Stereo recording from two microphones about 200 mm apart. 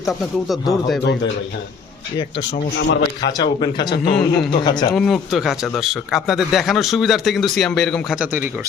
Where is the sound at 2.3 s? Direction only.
60° left (ahead or behind).